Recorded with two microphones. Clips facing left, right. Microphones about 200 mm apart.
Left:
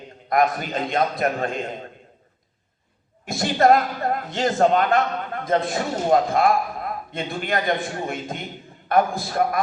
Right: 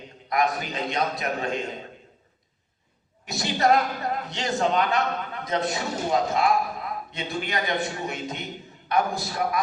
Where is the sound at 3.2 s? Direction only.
50° left (ahead or behind).